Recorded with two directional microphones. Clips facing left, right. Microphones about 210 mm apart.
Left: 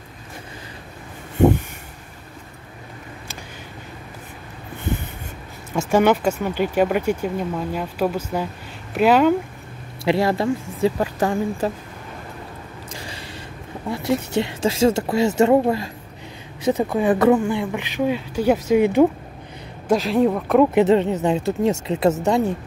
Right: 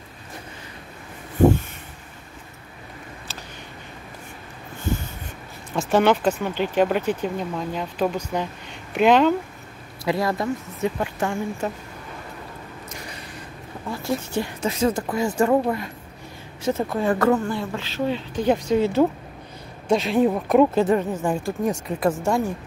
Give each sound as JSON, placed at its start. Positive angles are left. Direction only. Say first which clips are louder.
{"t": 5.7, "sound": "speech", "louder": "left 2 dB", "side_deg": 10}
{"t": 10.0, "sound": "speech", "louder": "left 4 dB", "side_deg": 25}
{"t": 14.3, "sound": "speech", "louder": "left 4 dB", "side_deg": 25}
{"t": 16.6, "sound": "speech", "louder": "left 4 dB", "side_deg": 15}
{"t": 19.9, "sound": "speech", "louder": "left 1 dB", "side_deg": 0}
{"t": 20.7, "sound": "speech", "louder": "left 4 dB", "side_deg": 25}